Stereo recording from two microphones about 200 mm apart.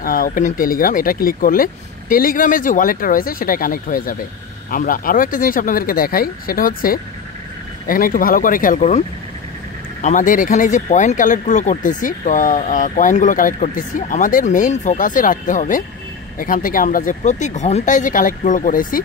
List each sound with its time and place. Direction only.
0.0 s speech: 45° left (ahead or behind)
10.0 s speech: 40° left (ahead or behind)